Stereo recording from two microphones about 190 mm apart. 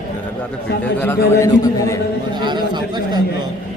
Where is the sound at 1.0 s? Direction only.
15° left (ahead or behind).